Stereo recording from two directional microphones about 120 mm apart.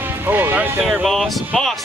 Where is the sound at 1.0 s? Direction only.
Centre (ahead or behind).